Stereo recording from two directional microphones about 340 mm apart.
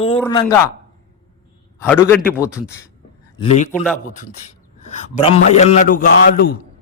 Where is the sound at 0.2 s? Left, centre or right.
Centre.